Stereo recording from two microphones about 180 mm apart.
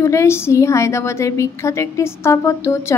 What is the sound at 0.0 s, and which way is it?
A woman's voice, 15° left (ahead or behind).